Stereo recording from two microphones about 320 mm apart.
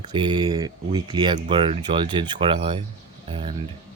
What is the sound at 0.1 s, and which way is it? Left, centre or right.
Speech, centre.